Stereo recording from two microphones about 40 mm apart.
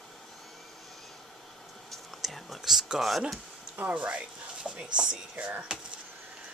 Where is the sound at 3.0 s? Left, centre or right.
Centre.